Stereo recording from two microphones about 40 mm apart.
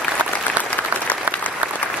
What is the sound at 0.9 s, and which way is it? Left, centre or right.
Applause, right.